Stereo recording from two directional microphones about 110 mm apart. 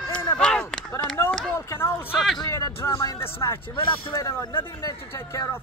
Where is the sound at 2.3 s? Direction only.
30° left (ahead or behind).